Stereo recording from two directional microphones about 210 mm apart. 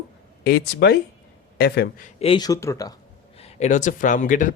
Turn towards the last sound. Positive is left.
turn(degrees=40)  # may be behind; listen again after turning